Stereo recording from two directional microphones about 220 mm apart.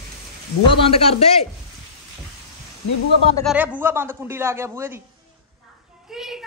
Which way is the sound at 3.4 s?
5° right (ahead or behind).